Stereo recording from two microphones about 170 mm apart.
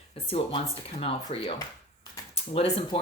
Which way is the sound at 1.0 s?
35° left (ahead or behind).